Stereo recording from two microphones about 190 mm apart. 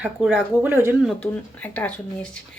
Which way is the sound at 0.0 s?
10° right (ahead or behind).